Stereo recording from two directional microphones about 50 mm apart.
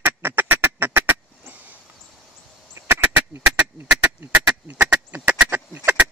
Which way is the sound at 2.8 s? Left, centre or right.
Right.